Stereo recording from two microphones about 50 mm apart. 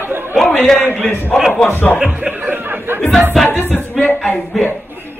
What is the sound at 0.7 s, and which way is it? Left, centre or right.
Speech, right.